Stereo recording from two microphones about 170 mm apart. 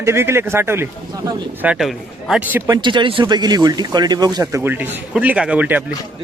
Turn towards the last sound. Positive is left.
turn(degrees=-10)  # may be behind; listen again after turning